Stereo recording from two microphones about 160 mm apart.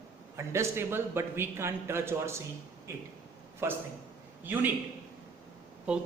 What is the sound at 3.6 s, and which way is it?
Speech, 15° right (ahead or behind).